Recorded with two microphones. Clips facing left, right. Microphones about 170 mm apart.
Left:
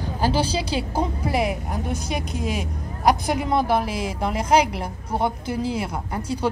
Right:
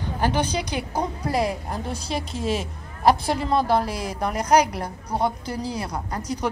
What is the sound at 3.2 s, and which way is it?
A woman's voice, 20° left (ahead or behind).